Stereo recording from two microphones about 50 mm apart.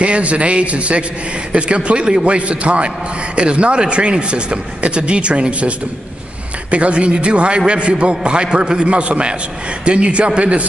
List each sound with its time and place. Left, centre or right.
0.0 s a man's voice: right